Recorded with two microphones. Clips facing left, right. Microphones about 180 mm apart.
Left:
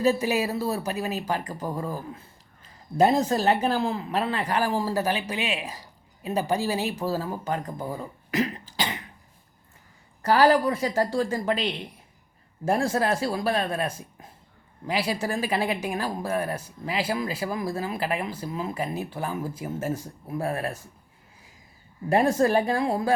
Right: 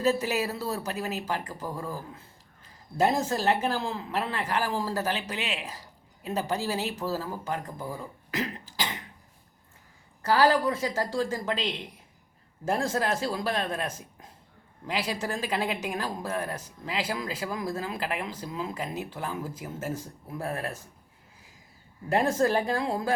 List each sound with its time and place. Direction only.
0.0 s speech: 10° left (ahead or behind)
3.2 s speech: 15° left (ahead or behind)
10.2 s speech: 15° left (ahead or behind)
12.6 s speech: 10° left (ahead or behind)
22.1 s speech: 15° left (ahead or behind)